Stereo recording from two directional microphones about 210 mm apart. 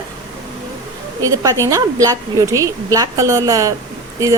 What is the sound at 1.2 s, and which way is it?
A woman's voice, 15° right (ahead or behind).